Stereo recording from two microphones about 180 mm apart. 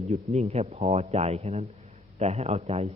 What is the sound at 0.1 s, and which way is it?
Speech, 35° right (ahead or behind).